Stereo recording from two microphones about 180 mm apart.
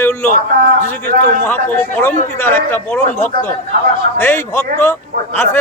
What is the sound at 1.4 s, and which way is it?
A man's voice, 10° left (ahead or behind).